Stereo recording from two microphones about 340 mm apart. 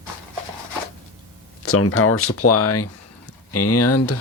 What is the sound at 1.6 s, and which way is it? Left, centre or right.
Speech, left.